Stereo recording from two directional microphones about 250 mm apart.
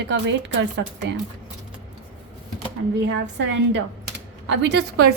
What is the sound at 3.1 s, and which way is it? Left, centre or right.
A woman's voice, right.